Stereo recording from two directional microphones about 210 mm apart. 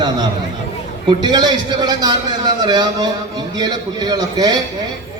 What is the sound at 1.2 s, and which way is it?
A man's voice, 20° right (ahead or behind).